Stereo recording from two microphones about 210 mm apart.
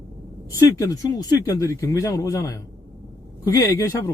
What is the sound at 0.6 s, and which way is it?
Speech, 15° left (ahead or behind).